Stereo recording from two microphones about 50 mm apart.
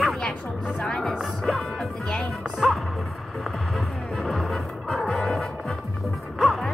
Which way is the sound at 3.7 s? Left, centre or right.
Centre.